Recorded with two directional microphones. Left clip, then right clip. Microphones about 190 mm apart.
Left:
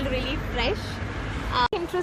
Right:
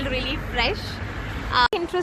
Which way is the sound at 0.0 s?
5° left (ahead or behind).